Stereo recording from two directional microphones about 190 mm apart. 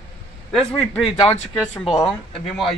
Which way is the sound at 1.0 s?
30° left (ahead or behind).